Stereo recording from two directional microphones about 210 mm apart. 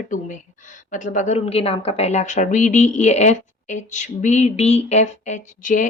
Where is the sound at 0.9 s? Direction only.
35° left (ahead or behind).